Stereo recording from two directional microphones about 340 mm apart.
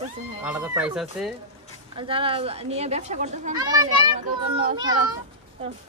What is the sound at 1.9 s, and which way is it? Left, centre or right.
Speech, centre.